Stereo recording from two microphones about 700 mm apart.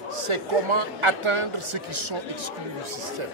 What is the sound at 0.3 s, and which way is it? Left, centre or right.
A man's voice, right.